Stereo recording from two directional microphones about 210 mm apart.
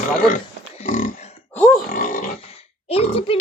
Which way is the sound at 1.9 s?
40° left (ahead or behind).